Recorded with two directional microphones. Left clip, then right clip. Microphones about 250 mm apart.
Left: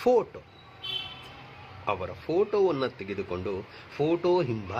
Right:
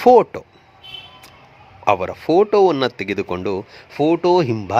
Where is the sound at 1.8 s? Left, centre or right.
Right.